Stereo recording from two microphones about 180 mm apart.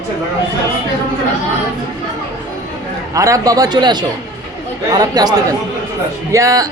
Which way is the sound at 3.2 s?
20° right (ahead or behind).